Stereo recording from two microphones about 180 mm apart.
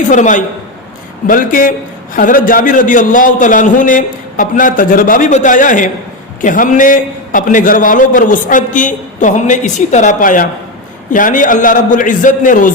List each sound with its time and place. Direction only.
0.1 s a man's voice: 45° left (ahead or behind)